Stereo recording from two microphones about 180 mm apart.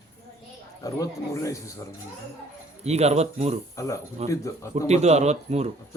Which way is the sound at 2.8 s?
35° right (ahead or behind).